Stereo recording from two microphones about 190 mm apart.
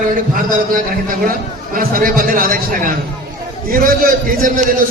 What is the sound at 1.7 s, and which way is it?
A man's voice, 45° right (ahead or behind).